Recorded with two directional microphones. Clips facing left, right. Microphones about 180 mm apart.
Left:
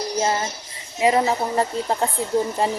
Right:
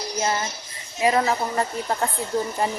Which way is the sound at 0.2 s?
30° left (ahead or behind).